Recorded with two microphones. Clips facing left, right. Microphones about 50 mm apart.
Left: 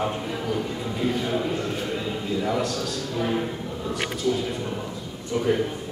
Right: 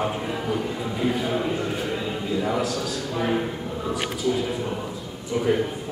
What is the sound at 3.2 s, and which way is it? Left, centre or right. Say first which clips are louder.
A man's voice: right 1 dB; centre.